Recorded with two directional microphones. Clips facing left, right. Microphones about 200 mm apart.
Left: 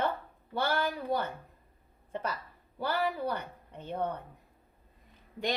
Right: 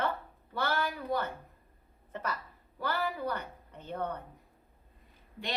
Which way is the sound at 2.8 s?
10° left (ahead or behind).